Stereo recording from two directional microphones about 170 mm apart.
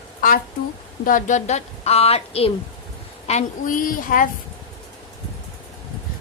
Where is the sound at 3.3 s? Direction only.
45° left (ahead or behind).